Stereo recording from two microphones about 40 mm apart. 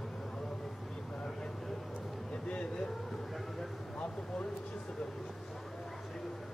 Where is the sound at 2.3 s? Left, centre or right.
Left.